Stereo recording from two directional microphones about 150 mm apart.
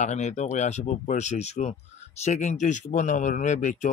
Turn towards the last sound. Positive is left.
turn(degrees=55)  # may be behind; listen again after turning